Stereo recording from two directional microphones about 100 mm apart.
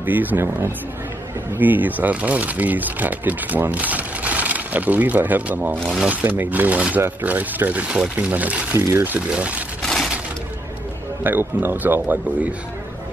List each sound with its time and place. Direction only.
0.0 s speech: 15° right (ahead or behind)
6.2 s speech: 20° right (ahead or behind)
8.7 s a man's voice: 25° right (ahead or behind)
9.1 s speech: 15° right (ahead or behind)
9.8 s crushing: 5° left (ahead or behind)
11.2 s a man's voice: 20° right (ahead or behind)